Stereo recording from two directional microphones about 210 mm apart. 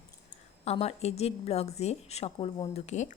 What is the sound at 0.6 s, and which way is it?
A woman's voice, 30° left (ahead or behind).